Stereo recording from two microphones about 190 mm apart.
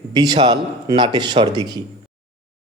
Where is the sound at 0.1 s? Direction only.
20° right (ahead or behind).